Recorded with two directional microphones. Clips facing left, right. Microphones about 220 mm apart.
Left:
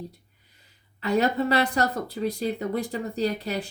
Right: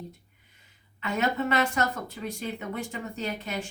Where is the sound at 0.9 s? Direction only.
35° left (ahead or behind).